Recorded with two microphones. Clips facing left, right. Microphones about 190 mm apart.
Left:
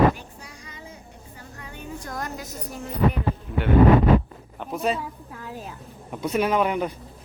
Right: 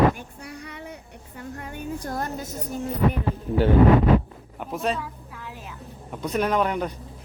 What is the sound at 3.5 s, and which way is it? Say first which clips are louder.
Speech: right 10 dB; 30° right (ahead or behind).